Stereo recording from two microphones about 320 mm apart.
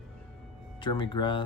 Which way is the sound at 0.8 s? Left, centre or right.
Centre.